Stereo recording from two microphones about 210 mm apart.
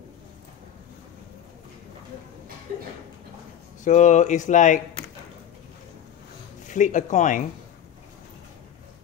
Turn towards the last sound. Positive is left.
turn(degrees=35)  # may be behind; listen again after turning